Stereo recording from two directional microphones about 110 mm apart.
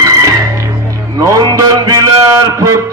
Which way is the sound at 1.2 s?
35° right (ahead or behind).